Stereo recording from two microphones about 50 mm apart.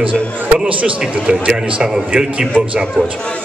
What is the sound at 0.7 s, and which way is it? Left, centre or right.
A man's voice, right.